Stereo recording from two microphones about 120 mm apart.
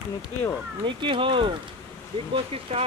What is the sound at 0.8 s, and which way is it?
Speech, 45° right (ahead or behind).